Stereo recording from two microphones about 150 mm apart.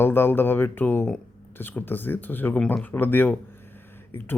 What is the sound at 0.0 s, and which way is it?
Speech, 15° left (ahead or behind).